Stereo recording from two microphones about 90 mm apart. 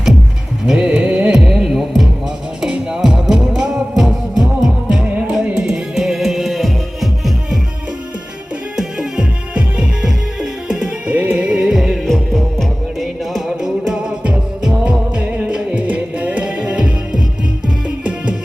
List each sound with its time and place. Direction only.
0.7 s music: 10° right (ahead or behind)
8.7 s music: 5° right (ahead or behind)